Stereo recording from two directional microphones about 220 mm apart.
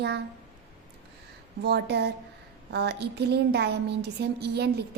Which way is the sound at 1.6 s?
50° right (ahead or behind).